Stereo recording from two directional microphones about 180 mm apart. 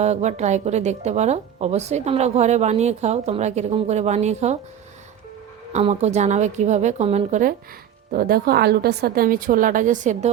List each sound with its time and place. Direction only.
0.0 s a woman's voice: 40° right (ahead or behind)
5.7 s a woman's voice: 40° right (ahead or behind)
8.1 s a woman's voice: 55° right (ahead or behind)